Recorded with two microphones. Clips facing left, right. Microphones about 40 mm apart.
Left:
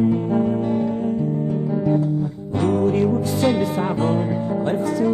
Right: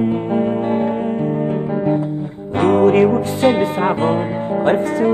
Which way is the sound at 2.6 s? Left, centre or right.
Right.